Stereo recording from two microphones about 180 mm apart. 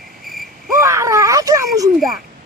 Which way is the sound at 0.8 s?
15° right (ahead or behind).